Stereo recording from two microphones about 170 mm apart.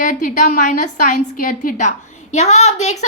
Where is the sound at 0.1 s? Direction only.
50° left (ahead or behind).